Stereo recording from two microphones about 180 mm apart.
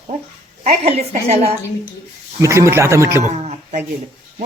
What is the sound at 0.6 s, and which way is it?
Speech, 35° right (ahead or behind).